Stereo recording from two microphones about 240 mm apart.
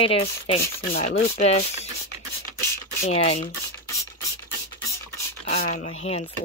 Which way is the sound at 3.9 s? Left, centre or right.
Centre.